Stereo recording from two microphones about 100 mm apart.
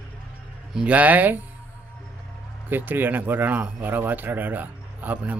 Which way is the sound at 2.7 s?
20° right (ahead or behind).